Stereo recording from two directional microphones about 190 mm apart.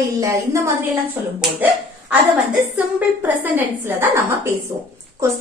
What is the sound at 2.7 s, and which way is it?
A woman's voice, 10° right (ahead or behind).